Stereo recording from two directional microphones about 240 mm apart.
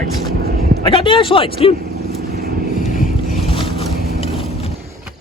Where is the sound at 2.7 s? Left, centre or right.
Left.